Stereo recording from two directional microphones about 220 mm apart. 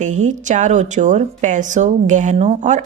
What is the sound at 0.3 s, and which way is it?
Speech, 35° right (ahead or behind).